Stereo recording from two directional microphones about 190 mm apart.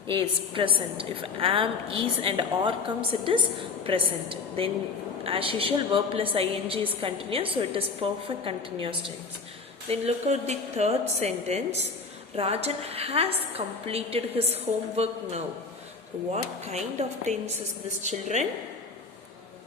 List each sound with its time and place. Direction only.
0.1 s a woman's voice: 25° right (ahead or behind)